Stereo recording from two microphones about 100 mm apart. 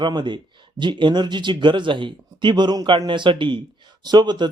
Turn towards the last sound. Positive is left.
turn(degrees=-50)  # may be behind; listen again after turning